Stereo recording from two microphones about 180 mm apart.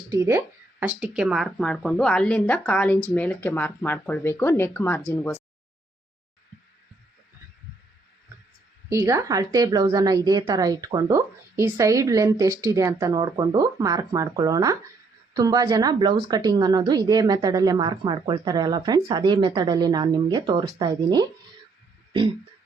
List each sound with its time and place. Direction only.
0.1 s speech: 15° right (ahead or behind); by 5.4 s 10° left (ahead or behind)
8.9 s a woman's voice: 15° right (ahead or behind)